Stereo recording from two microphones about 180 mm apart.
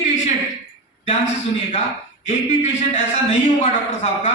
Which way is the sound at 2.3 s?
40° left (ahead or behind).